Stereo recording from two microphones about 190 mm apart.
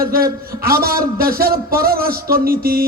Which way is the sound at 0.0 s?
50° right (ahead or behind).